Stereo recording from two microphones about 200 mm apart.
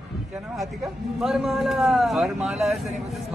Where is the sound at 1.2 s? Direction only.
Centre (ahead or behind).